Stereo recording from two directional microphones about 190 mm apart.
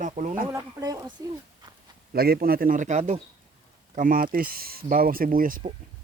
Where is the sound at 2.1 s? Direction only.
55° right (ahead or behind).